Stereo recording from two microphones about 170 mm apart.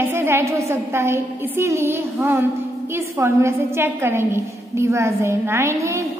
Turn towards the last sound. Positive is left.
turn(degrees=-15)  # may be behind; listen again after turning